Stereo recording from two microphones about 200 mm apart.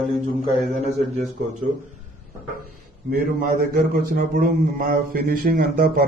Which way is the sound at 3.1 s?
45° right (ahead or behind).